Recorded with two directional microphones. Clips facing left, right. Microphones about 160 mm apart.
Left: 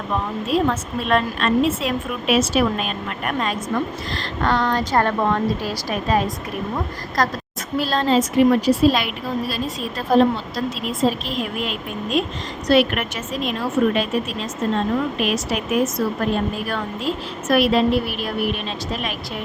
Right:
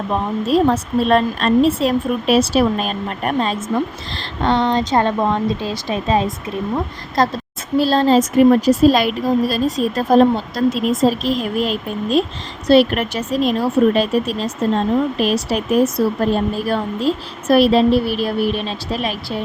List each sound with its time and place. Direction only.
0.1 s a woman's voice: 35° right (ahead or behind)